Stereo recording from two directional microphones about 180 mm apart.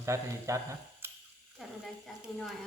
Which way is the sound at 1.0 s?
10° right (ahead or behind).